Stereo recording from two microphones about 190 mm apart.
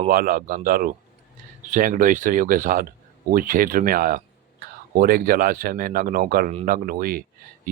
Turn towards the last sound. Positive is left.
turn(degrees=-50)  # may be behind; listen again after turning